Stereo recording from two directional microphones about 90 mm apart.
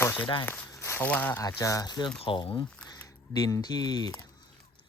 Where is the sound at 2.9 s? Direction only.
45° left (ahead or behind).